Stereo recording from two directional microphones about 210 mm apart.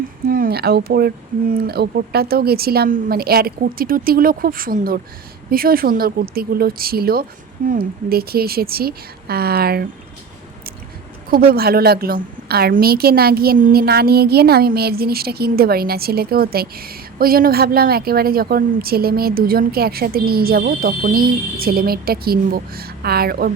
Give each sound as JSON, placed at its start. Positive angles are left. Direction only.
{"t": 0.3, "sound": "a woman's voice", "side_deg": -45}
{"t": 11.3, "sound": "a woman's voice", "side_deg": -45}